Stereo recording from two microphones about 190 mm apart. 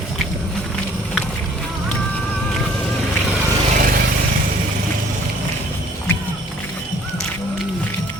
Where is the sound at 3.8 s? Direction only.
50° right (ahead or behind).